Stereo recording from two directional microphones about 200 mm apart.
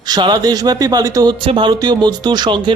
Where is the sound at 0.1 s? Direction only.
20° right (ahead or behind).